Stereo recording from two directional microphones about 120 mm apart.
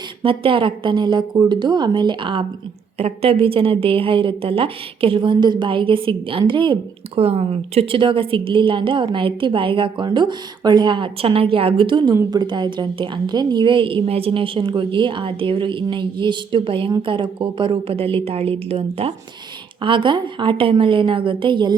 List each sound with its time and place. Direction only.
0.2 s a woman's voice: 45° right (ahead or behind)
7.2 s a woman's voice: 55° right (ahead or behind)
19.8 s a woman's voice: 45° right (ahead or behind)